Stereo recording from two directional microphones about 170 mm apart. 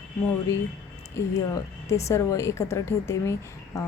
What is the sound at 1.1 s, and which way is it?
A woman's voice, 20° left (ahead or behind).